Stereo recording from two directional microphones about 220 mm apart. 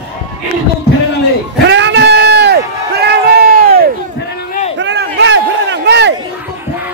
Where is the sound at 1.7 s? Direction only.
55° right (ahead or behind).